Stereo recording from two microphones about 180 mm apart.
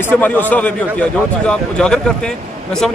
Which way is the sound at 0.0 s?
10° left (ahead or behind).